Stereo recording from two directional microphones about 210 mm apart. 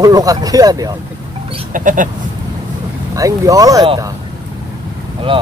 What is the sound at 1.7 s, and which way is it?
Sheep, 40° right (ahead or behind).